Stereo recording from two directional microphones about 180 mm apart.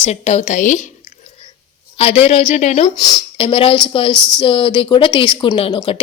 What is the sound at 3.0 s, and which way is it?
A woman's voice, 20° left (ahead or behind).